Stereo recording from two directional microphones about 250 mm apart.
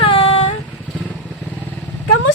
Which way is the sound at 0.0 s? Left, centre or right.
Left.